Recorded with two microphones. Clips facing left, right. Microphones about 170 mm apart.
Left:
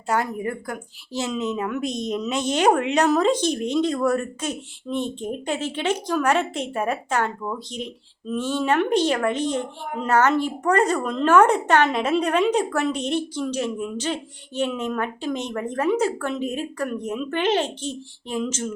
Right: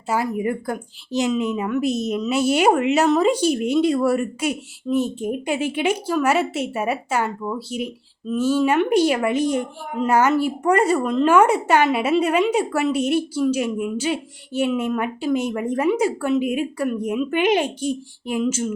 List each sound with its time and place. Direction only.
0.1 s speech: 5° right (ahead or behind)
0.4 s a woman's voice: 20° right (ahead or behind)